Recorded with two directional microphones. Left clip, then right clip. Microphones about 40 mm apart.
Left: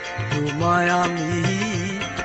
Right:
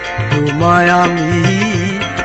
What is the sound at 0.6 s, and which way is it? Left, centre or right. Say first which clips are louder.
Music: right 9 dB; left.